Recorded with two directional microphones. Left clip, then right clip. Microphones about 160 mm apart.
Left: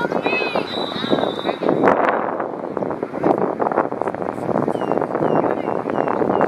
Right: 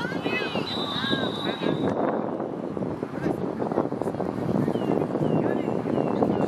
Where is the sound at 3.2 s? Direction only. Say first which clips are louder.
Left 12 dB; 30° left (ahead or behind).